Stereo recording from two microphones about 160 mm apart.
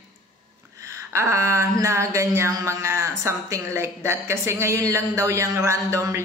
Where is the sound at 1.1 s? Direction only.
15° right (ahead or behind).